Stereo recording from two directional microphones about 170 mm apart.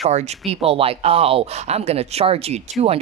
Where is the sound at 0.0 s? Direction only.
40° right (ahead or behind).